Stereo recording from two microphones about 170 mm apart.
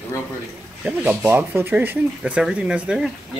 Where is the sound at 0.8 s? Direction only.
10° right (ahead or behind).